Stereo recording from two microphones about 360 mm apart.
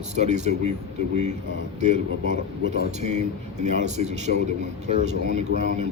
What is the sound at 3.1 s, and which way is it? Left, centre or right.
A man's voice, centre.